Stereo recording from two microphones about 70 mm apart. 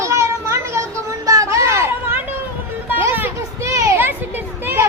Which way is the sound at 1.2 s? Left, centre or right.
Right.